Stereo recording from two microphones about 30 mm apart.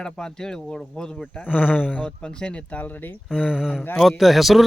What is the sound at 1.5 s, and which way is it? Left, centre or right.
Speech, left.